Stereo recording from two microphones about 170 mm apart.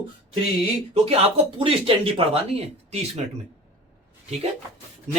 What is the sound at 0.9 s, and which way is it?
Speech, 35° right (ahead or behind).